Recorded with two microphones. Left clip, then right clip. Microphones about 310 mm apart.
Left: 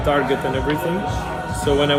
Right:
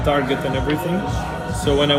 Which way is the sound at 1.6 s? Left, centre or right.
Centre.